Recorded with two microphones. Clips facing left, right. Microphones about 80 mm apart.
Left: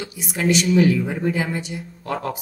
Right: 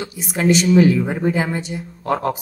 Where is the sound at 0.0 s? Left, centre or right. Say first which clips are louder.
Right 4 dB; right.